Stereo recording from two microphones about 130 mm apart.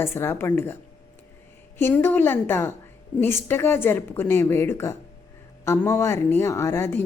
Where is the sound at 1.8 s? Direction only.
15° left (ahead or behind).